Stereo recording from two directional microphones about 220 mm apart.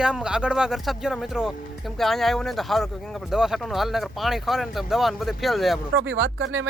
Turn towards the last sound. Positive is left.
turn(degrees=-60)  # may be behind; listen again after turning